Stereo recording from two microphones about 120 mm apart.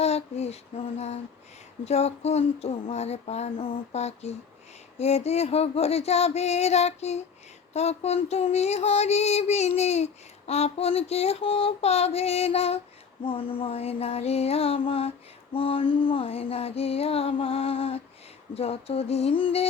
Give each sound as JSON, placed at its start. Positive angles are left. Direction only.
{"t": 0.0, "sound": "female singing", "side_deg": 60}
{"t": 13.2, "sound": "female singing", "side_deg": 50}